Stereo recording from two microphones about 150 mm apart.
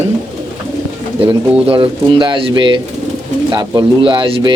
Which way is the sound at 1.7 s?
35° right (ahead or behind).